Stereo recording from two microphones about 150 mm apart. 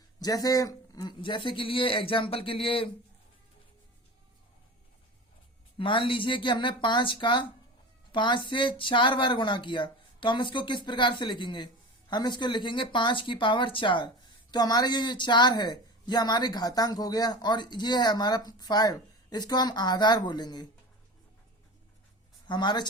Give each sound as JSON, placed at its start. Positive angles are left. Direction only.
{"t": 0.2, "sound": "speech", "side_deg": 25}
{"t": 5.7, "sound": "speech", "side_deg": 35}
{"t": 22.4, "sound": "speech", "side_deg": 30}